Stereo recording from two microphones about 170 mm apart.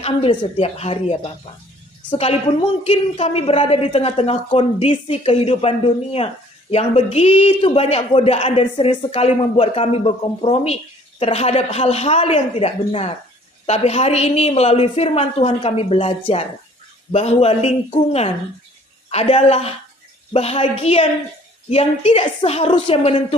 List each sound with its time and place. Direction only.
0.0 s a woman's voice: 35° left (ahead or behind)